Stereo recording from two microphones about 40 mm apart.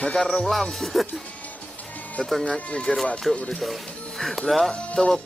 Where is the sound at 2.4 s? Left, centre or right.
Left.